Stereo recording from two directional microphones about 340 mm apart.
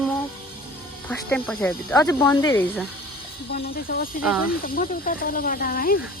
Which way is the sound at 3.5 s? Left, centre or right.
Left.